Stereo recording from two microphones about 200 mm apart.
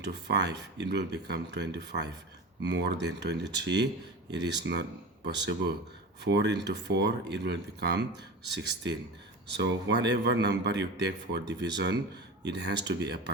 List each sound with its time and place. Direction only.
0.0 s a man's voice: 60° right (ahead or behind)